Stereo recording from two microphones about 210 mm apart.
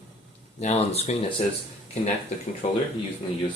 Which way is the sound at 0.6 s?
30° left (ahead or behind).